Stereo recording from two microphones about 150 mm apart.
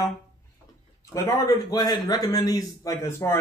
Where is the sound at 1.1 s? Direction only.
20° left (ahead or behind).